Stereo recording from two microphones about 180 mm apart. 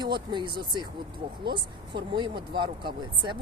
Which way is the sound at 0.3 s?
25° right (ahead or behind).